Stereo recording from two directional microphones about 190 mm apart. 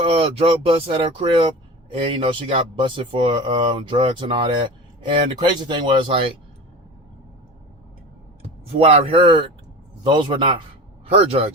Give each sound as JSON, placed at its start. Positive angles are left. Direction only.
{"t": 0.0, "sound": "speech", "side_deg": -30}
{"t": 8.4, "sound": "speech", "side_deg": -30}